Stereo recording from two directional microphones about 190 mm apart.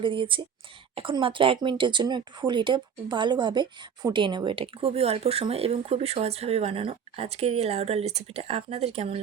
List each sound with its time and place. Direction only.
0.0 s speech: 25° right (ahead or behind)